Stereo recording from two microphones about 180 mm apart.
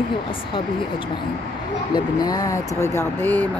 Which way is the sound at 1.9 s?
20° left (ahead or behind).